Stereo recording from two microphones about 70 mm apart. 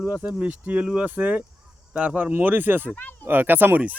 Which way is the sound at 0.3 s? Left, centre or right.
Right.